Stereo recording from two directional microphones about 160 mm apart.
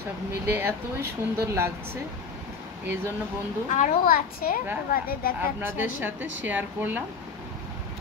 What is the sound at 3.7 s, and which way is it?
A child's voice, 60° left (ahead or behind).